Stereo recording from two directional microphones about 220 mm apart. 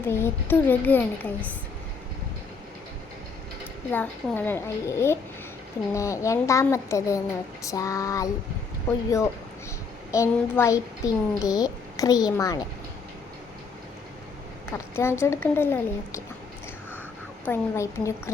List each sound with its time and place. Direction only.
0.1 s a child's voice: 10° left (ahead or behind)
3.6 s a child's voice: 10° left (ahead or behind)
14.7 s a child's voice: 10° left (ahead or behind)
17.4 s a child's voice: 10° left (ahead or behind)